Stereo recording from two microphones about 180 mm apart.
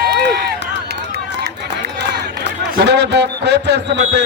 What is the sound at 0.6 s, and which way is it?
Run, 75° right (ahead or behind).